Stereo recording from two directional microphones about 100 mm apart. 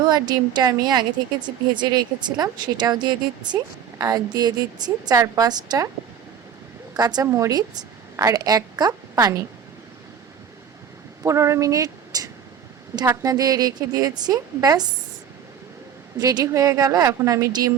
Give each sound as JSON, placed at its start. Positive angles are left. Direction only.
{"t": 0.0, "sound": "a woman's voice", "side_deg": -45}
{"t": 6.9, "sound": "a woman's voice", "side_deg": -40}
{"t": 7.3, "sound": "a woman's voice", "side_deg": -30}
{"t": 11.2, "sound": "a woman's voice", "side_deg": -30}
{"t": 16.1, "sound": "a woman's voice", "side_deg": -40}